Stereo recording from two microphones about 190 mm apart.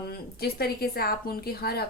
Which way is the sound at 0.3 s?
55° left (ahead or behind).